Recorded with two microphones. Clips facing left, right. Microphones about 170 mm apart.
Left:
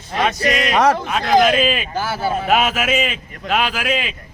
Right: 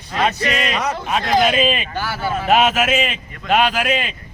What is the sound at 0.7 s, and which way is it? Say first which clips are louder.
Speech: left 7 dB; 65° left (ahead or behind).